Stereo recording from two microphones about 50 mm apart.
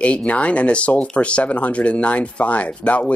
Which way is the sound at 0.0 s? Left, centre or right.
Left.